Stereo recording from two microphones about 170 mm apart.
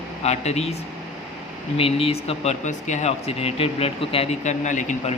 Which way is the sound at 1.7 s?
35° left (ahead or behind).